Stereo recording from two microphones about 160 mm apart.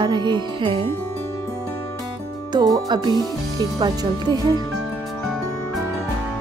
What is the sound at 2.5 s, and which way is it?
Music, 25° right (ahead or behind).